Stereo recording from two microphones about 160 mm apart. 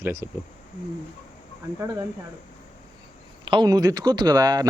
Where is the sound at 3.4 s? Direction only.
25° right (ahead or behind).